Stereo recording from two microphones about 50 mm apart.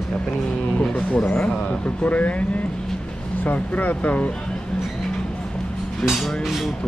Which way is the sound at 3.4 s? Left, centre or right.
Left.